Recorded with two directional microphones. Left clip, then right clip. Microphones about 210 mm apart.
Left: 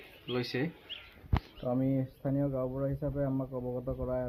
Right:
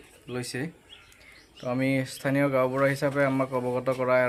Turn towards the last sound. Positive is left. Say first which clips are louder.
# right 12 dB
turn(degrees=-25)  # may be behind; listen again after turning